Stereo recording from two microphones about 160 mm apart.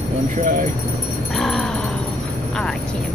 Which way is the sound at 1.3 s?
Centre (ahead or behind).